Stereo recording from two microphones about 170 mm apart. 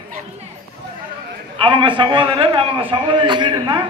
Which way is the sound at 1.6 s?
30° right (ahead or behind).